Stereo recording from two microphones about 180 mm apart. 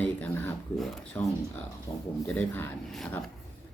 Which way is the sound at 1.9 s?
15° left (ahead or behind).